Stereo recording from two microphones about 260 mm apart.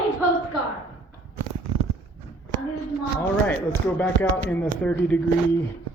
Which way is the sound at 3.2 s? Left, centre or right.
Centre.